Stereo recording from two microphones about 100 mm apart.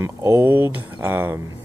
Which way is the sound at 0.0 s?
25° right (ahead or behind).